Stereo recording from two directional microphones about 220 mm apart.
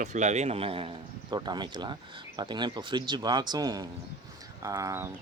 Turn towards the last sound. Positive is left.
turn(degrees=-15)  # may be behind; listen again after turning